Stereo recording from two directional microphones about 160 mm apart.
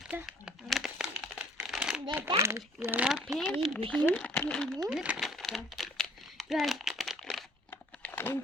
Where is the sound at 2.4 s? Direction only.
15° right (ahead or behind).